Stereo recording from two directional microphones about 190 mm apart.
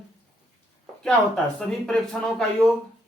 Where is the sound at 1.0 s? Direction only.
5° left (ahead or behind).